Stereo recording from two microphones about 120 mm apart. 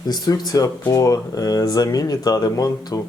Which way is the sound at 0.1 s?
35° left (ahead or behind).